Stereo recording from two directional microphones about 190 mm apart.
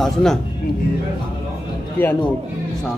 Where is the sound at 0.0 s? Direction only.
Centre (ahead or behind).